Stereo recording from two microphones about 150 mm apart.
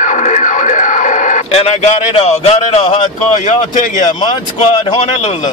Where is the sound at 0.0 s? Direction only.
55° left (ahead or behind).